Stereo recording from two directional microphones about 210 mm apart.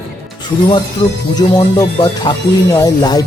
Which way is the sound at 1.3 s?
20° left (ahead or behind).